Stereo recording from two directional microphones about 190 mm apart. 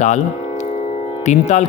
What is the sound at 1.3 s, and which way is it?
Speech, 35° left (ahead or behind).